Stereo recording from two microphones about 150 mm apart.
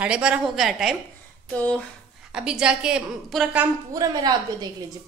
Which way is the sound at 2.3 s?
5° right (ahead or behind).